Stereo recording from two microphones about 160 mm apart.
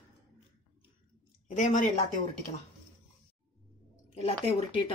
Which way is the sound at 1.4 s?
50° left (ahead or behind).